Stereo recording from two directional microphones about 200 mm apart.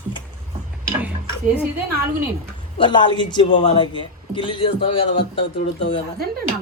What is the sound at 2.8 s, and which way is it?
A woman's voice, 20° left (ahead or behind).